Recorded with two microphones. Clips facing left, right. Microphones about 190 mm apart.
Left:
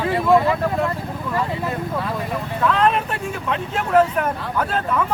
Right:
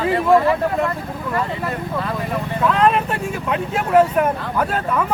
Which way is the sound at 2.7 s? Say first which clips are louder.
Right 3 dB; 5° right (ahead or behind).